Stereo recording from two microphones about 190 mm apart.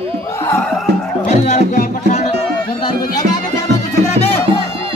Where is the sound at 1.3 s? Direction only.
40° left (ahead or behind).